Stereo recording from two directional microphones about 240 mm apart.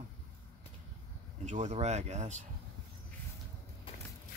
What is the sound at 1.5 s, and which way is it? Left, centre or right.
Speech, right.